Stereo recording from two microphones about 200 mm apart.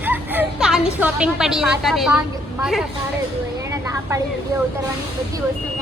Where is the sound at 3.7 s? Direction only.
15° right (ahead or behind).